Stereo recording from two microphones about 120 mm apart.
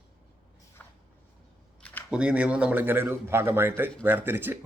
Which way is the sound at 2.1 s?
10° right (ahead or behind).